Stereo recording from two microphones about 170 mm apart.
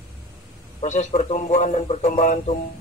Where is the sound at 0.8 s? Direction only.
45° left (ahead or behind).